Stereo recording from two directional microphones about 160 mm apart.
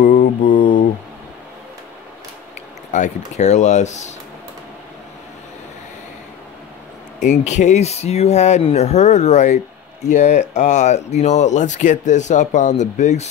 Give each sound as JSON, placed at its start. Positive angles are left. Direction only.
{"t": 0.0, "sound": "mantra", "side_deg": 55}
{"t": 0.6, "sound": "a sound", "side_deg": 90}
{"t": 2.9, "sound": "speech", "side_deg": 50}
{"t": 7.2, "sound": "speech", "side_deg": 50}